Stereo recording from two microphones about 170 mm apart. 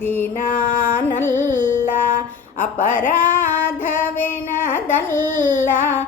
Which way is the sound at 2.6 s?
10° left (ahead or behind).